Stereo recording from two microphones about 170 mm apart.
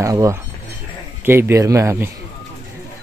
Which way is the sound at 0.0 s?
20° right (ahead or behind).